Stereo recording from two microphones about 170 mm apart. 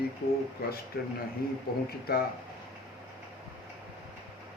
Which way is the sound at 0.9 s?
70° left (ahead or behind).